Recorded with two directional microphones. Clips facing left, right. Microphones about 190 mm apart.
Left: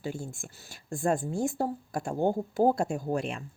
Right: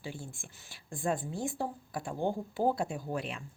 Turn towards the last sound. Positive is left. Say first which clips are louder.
# left 6 dB
turn(degrees=45)  # may be behind; listen again after turning